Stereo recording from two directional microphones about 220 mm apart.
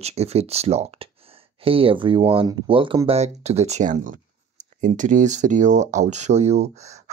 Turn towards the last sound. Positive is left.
turn(degrees=-30)  # may be behind; listen again after turning